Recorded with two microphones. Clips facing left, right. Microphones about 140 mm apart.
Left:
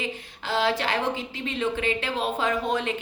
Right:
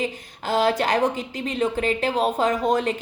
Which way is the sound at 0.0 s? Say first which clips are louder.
Right 5 dB; 45° right (ahead or behind).